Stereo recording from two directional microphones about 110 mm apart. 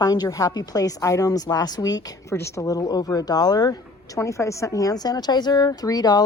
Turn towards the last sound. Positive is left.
turn(degrees=35)  # may be behind; listen again after turning